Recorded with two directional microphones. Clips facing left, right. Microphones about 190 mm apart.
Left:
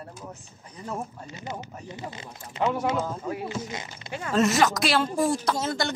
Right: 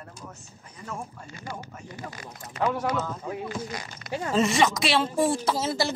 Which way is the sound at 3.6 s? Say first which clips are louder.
Even; 20° left (ahead or behind).